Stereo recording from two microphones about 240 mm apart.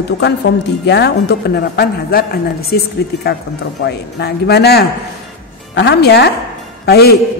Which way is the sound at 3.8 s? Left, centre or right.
Left.